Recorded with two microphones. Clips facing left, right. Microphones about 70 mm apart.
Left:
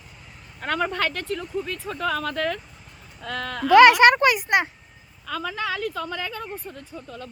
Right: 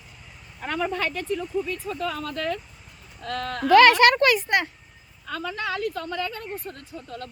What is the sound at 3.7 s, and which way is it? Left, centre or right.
Speech, centre.